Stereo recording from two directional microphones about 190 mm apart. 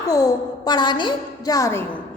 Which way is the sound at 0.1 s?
20° left (ahead or behind).